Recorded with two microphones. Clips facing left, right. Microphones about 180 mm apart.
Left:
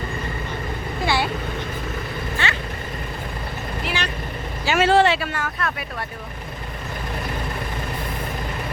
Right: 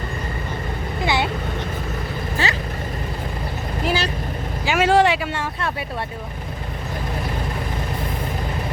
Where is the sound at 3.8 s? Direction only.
35° right (ahead or behind).